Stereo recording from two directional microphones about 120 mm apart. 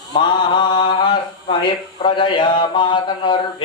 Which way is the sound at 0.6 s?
40° left (ahead or behind).